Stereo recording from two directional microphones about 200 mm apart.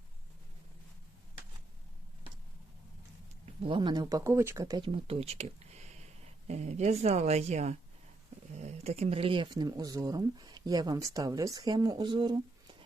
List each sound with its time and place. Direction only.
3.6 s speech: 25° right (ahead or behind)